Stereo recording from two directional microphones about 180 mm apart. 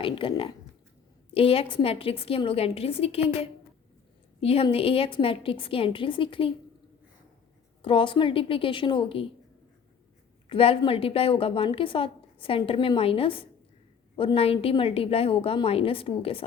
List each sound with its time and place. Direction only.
0.0 s a woman's voice: 30° left (ahead or behind)
7.8 s a woman's voice: 30° left (ahead or behind)
10.5 s a woman's voice: 30° left (ahead or behind)